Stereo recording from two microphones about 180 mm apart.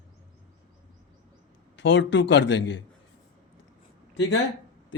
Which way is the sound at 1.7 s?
85° left.